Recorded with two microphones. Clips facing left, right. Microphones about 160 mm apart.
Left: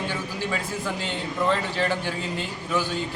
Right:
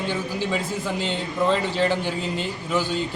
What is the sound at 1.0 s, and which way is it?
A man's voice, 20° right (ahead or behind).